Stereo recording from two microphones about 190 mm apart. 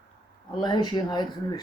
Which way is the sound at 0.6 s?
20° left (ahead or behind).